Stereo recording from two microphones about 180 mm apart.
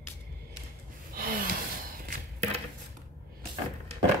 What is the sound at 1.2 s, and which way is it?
Gasp, 55° right (ahead or behind).